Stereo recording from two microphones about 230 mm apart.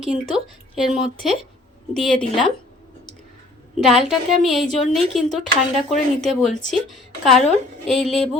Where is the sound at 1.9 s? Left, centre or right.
Centre.